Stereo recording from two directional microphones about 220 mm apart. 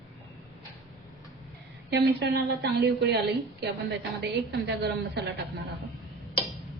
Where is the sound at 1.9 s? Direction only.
50° right (ahead or behind).